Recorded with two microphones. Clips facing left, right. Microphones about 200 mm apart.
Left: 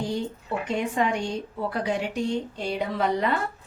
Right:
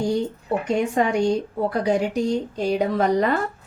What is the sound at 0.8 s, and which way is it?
A woman's voice, 40° right (ahead or behind).